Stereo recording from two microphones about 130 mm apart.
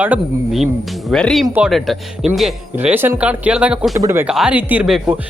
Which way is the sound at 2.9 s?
15° right (ahead or behind).